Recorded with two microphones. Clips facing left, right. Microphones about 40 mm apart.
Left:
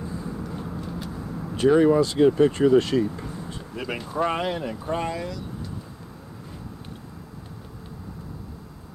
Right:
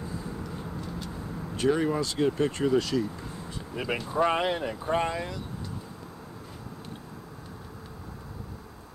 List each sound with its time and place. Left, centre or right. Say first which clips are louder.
1.6 s speech: left 8 dB; centre
2.8 s speech: left 5 dB; left
3.7 s speech: even; centre